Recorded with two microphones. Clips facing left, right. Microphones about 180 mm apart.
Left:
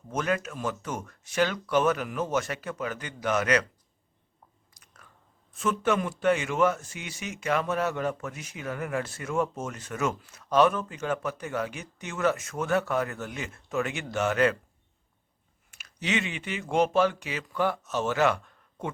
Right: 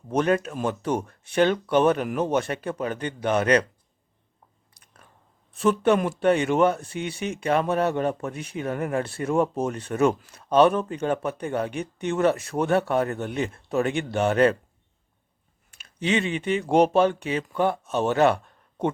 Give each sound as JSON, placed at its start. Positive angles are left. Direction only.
{"t": 0.1, "sound": "a man's voice", "side_deg": -35}
{"t": 4.8, "sound": "chewing", "side_deg": -60}
{"t": 5.5, "sound": "a man's voice", "side_deg": -35}
{"t": 15.8, "sound": "speech", "side_deg": -30}
{"t": 18.1, "sound": "a sound", "side_deg": -30}